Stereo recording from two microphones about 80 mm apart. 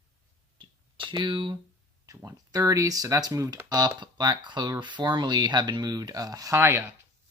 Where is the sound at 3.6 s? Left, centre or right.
Right.